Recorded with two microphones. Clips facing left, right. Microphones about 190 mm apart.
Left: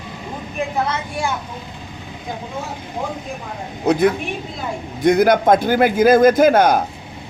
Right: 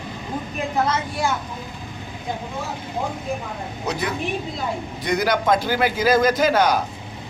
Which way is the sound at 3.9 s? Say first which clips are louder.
Left 9 dB; 55° left (ahead or behind).